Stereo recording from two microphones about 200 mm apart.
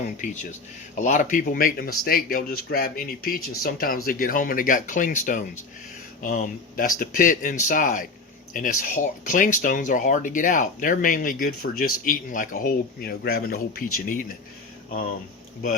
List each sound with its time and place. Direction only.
0.2 s speech: 40° left (ahead or behind)